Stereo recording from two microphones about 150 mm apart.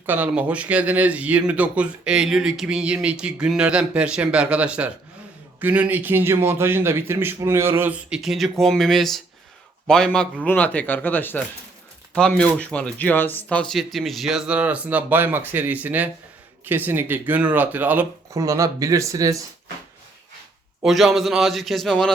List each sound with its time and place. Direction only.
0.0 s a man's voice: 10° right (ahead or behind)
18.3 s speech: 20° right (ahead or behind)
20.8 s speech: centre (ahead or behind)